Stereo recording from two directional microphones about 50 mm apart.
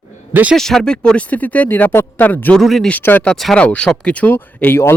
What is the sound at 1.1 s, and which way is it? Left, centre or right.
Speech, left.